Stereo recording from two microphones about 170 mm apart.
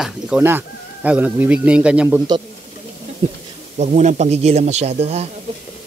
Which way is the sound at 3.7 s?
40° right (ahead or behind).